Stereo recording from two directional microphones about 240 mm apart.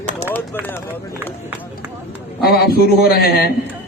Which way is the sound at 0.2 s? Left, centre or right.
Right.